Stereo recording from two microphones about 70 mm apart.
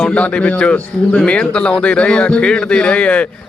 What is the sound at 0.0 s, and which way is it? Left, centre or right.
A man's voice, centre.